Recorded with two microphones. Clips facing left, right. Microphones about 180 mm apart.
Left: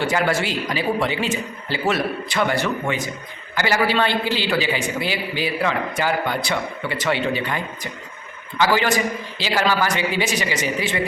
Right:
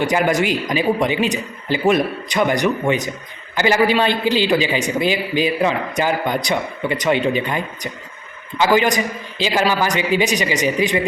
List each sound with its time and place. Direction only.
0.0 s a man's voice: 15° right (ahead or behind)